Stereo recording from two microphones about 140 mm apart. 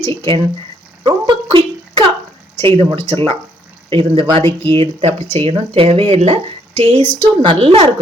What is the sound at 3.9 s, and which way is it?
Speech, 40° right (ahead or behind).